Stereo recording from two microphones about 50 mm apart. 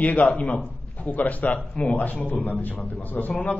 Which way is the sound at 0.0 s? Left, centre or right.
Left.